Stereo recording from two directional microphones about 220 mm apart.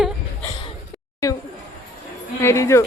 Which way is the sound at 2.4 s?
10° left (ahead or behind).